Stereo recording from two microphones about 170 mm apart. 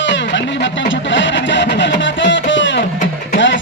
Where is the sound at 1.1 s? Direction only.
90° left.